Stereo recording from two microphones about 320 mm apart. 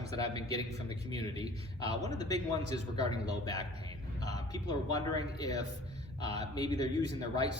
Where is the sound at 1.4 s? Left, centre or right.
Centre.